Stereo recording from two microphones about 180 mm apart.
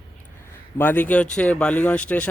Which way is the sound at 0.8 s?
10° left (ahead or behind).